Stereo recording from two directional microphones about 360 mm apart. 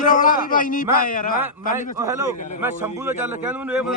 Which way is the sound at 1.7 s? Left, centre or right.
Centre.